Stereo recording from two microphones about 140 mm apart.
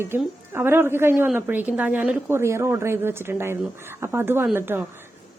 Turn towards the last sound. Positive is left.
turn(degrees=-15)  # may be behind; listen again after turning